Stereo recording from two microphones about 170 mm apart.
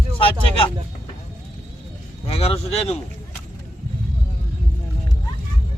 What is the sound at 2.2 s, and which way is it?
Speech, 35° left (ahead or behind).